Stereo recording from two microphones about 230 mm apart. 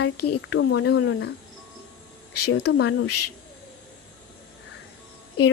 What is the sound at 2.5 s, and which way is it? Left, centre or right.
Speech, left.